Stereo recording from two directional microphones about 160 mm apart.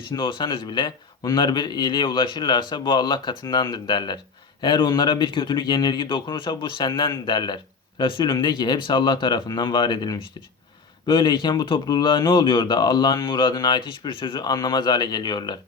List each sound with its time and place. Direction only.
0.1 s speech: 30° left (ahead or behind)